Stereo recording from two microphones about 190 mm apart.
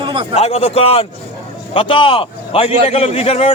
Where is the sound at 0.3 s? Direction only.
30° left (ahead or behind).